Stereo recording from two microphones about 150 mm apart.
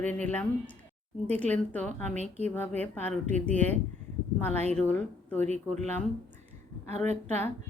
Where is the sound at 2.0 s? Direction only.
50° right (ahead or behind).